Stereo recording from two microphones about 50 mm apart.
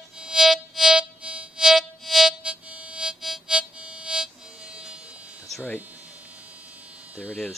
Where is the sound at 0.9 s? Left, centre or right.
Right.